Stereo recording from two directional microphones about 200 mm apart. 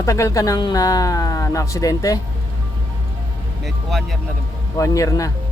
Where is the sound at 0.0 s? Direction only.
15° left (ahead or behind).